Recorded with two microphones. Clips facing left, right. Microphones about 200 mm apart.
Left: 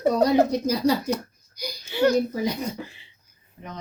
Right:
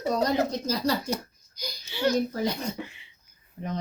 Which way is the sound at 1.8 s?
50° left (ahead or behind).